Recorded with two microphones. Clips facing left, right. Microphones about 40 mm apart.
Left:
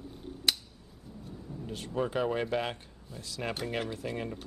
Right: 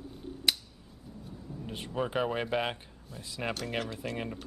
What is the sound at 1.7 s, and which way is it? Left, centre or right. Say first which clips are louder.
Speech: left 1 dB; centre.